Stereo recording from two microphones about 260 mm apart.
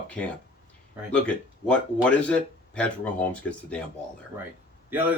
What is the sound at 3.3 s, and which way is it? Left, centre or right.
Speech, centre.